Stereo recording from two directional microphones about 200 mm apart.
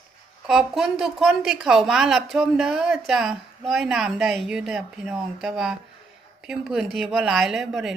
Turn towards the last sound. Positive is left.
turn(degrees=0)  # may be behind; listen again after turning